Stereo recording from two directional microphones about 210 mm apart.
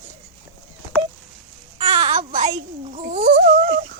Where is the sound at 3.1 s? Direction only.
35° right (ahead or behind).